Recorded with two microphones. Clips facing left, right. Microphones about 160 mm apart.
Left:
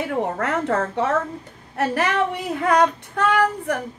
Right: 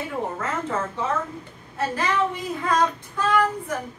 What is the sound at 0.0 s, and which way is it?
A woman's voice, 70° left (ahead or behind).